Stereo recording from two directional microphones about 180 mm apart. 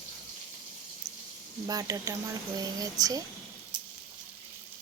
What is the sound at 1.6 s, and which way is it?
Speech, 20° right (ahead or behind).